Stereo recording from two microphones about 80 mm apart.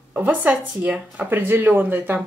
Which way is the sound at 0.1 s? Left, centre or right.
Right.